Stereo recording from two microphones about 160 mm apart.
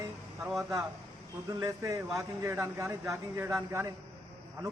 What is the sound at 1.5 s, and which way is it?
A man's voice, 20° right (ahead or behind).